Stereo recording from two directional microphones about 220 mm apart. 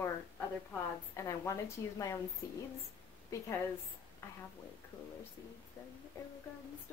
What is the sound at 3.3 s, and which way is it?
Speech, 15° left (ahead or behind).